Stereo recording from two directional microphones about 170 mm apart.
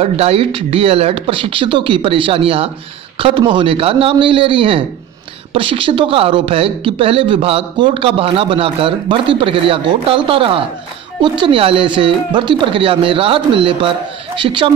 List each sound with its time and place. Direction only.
0.0 s speech: 35° right (ahead or behind)